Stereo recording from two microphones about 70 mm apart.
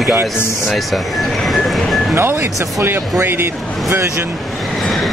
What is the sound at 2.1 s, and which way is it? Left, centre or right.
Speech, right.